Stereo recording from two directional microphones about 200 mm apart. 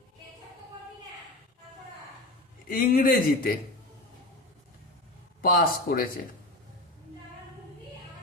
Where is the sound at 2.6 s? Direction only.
45° left (ahead or behind).